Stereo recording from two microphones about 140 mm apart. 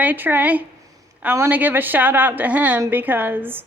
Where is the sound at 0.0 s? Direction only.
10° right (ahead or behind).